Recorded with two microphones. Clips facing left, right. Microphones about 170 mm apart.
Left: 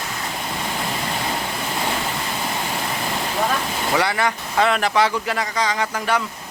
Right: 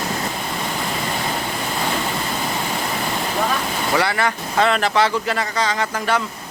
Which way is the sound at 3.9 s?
15° left (ahead or behind).